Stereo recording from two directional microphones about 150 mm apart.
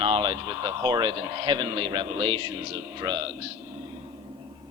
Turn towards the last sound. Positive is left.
turn(degrees=-30)  # may be behind; listen again after turning